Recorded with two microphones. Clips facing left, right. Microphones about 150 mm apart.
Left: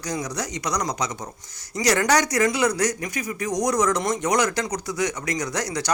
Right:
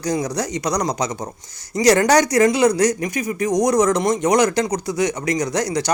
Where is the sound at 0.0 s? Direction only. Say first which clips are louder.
Right 7 dB; 35° right (ahead or behind).